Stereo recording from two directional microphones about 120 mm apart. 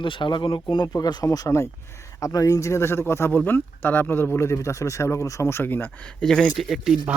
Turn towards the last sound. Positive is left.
turn(degrees=0)  # may be behind; listen again after turning